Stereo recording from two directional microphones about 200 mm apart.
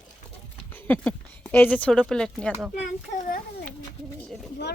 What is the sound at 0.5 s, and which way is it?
Speech, 10° left (ahead or behind).